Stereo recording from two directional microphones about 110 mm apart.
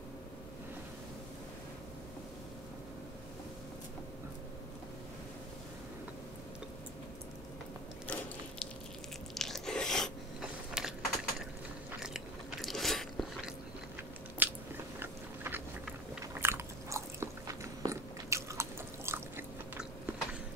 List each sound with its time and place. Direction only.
8.1 s ratchet: 15° left (ahead or behind)
9.3 s chewing: 5° left (ahead or behind)
10.7 s typing: 5° right (ahead or behind)
12.6 s biting: centre (ahead or behind)
14.4 s biting: 15° right (ahead or behind)
15.0 s a sound: 20° right (ahead or behind)
16.3 s biting: 20° right (ahead or behind)